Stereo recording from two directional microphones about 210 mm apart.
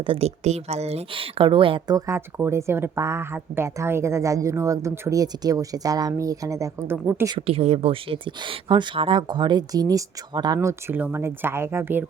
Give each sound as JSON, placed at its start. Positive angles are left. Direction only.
{"t": 0.0, "sound": "speech", "side_deg": -30}
{"t": 7.3, "sound": "speech", "side_deg": -30}